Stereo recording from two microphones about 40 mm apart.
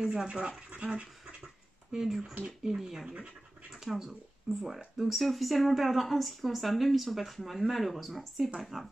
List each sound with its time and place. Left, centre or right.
0.0 s speech: centre
1.9 s speech: centre